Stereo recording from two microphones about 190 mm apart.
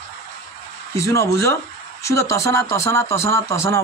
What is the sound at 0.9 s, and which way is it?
A man's voice, 15° left (ahead or behind).